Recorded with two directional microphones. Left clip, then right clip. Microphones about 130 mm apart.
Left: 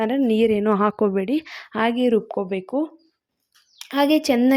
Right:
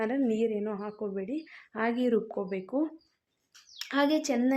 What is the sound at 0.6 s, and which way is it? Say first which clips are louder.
A woman's voice: left 16 dB; 90° left.